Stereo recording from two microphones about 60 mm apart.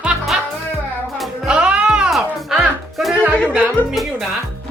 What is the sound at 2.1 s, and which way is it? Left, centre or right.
Music, centre.